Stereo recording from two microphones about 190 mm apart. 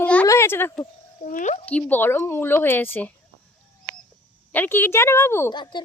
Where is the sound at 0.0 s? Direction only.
10° left (ahead or behind).